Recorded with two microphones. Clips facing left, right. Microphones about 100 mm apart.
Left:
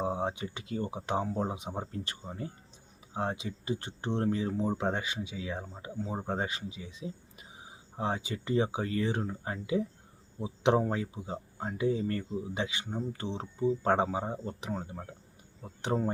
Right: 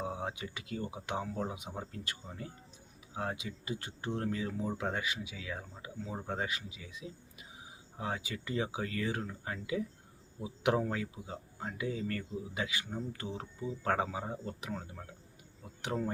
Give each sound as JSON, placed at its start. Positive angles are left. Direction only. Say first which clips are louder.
{"t": 0.0, "sound": "speech", "louder": "left 6 dB", "side_deg": 30}